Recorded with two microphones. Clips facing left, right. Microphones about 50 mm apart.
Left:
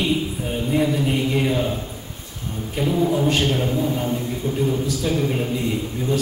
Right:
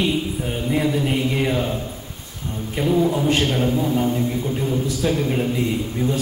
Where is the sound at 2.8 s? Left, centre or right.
Centre.